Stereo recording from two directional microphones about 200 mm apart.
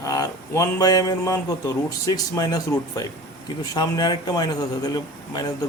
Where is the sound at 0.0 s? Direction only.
15° left (ahead or behind).